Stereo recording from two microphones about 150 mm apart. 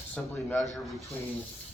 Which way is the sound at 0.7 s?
Centre (ahead or behind).